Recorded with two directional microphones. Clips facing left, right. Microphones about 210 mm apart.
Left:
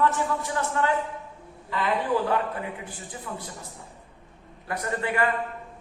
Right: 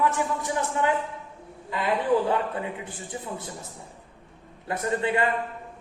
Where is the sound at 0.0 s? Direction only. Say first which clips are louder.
Left 1 dB; 15° right (ahead or behind).